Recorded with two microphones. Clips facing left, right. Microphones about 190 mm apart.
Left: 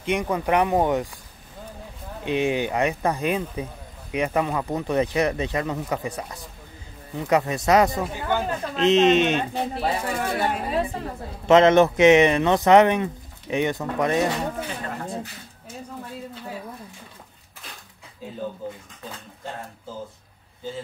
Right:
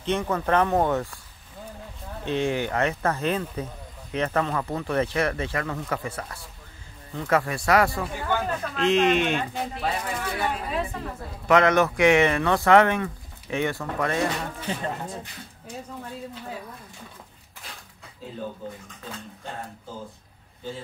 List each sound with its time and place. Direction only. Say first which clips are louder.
0.0 s speech: left 1 dB; 15° left (ahead or behind)
2.2 s speech: left 2 dB; 15° left (ahead or behind)
10.2 s speech: left 4 dB; 50° left (ahead or behind); by 14.2 s 20° left (ahead or behind)